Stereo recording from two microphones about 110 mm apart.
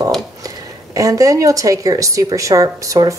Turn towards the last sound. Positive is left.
turn(degrees=-30)  # may be behind; listen again after turning